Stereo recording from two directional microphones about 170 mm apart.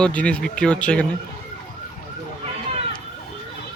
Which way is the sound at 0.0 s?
5° left (ahead or behind).